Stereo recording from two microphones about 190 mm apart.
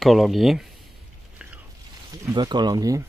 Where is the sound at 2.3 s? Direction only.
20° right (ahead or behind).